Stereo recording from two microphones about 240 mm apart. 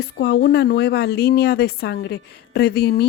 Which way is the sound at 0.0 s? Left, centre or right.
Left.